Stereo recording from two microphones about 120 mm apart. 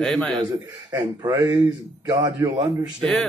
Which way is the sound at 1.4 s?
35° right (ahead or behind).